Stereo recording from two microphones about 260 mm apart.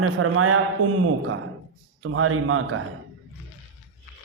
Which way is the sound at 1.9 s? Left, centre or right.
Right.